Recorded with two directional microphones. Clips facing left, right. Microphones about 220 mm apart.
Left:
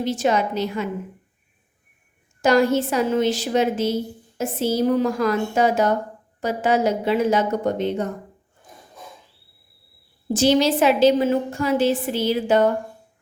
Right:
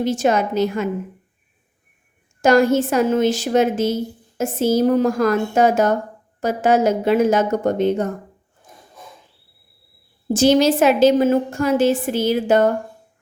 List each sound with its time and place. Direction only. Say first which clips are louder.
0.0 s a woman's voice: right 3 dB; 45° right (ahead or behind)
2.4 s a woman's voice: right 3 dB; 45° right (ahead or behind)
10.3 s a woman's voice: right 3 dB; 45° right (ahead or behind)